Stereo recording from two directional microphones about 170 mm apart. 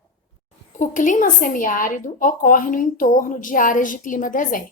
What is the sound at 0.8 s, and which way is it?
Speech, 50° left (ahead or behind).